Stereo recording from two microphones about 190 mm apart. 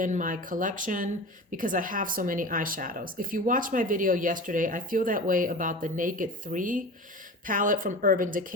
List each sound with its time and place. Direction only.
0.0 s speech: 45° right (ahead or behind)